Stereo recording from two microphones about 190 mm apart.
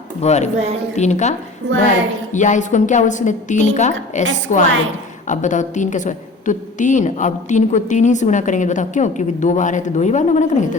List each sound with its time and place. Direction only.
0.2 s a woman's voice: 35° left (ahead or behind)